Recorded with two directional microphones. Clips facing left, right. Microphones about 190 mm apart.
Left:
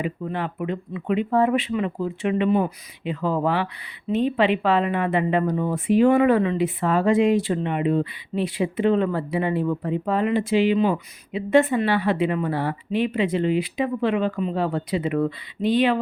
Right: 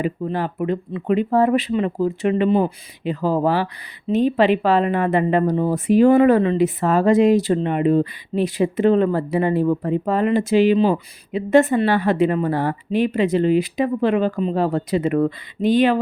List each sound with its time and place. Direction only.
0.0 s speech: 35° right (ahead or behind)